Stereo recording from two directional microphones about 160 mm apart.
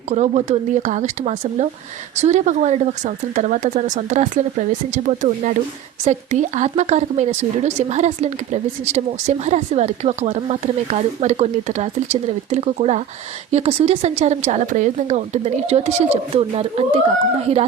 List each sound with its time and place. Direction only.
0.1 s speech: 45° right (ahead or behind)